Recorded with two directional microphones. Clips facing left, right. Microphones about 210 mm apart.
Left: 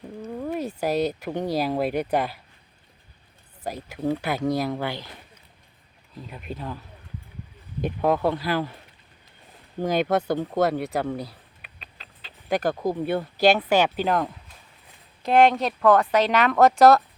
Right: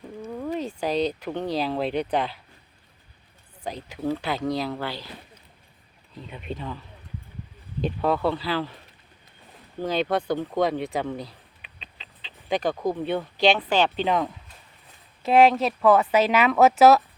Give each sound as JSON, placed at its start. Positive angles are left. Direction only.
{"t": 0.3, "sound": "speech", "side_deg": 5}
{"t": 3.6, "sound": "speech", "side_deg": 10}
{"t": 6.2, "sound": "speech", "side_deg": 5}
{"t": 9.8, "sound": "speech", "side_deg": 10}